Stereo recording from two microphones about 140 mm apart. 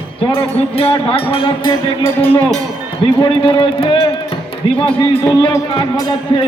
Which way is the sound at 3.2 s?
35° left (ahead or behind).